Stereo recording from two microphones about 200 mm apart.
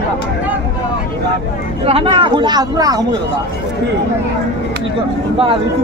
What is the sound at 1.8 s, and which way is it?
Speech, 30° right (ahead or behind).